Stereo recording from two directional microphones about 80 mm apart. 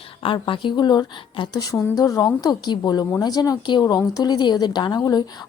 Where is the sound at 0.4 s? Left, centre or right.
Left.